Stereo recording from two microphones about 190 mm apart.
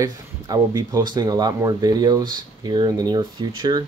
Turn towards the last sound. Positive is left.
turn(degrees=-20)  # may be behind; listen again after turning